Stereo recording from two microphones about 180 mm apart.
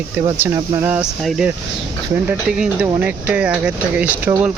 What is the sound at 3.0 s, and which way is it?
Speech, 5° right (ahead or behind).